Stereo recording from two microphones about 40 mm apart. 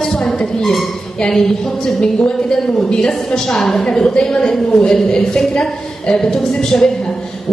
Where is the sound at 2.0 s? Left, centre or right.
Left.